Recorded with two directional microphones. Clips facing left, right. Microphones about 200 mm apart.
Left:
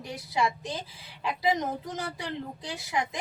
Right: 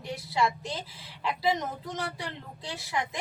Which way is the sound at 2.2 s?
20° left (ahead or behind).